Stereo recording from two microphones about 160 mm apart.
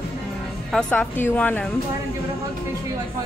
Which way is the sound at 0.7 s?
10° left (ahead or behind).